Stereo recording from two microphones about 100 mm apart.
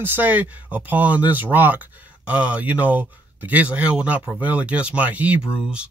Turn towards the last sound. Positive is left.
turn(degrees=-10)  # may be behind; listen again after turning